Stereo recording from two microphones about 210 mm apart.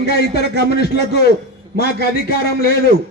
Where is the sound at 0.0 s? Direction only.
50° left (ahead or behind).